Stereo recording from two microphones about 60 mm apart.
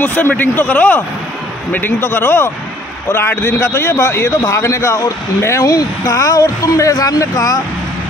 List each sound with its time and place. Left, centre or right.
0.0 s a man's voice: left
5.7 s speech: left